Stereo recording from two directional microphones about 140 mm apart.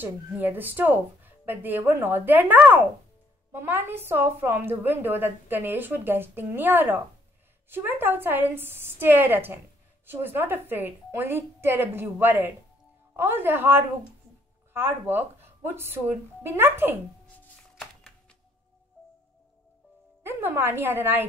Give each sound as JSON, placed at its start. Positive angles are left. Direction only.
{"t": 0.0, "sound": "a woman's voice", "side_deg": -15}
{"t": 20.2, "sound": "a woman's voice", "side_deg": -15}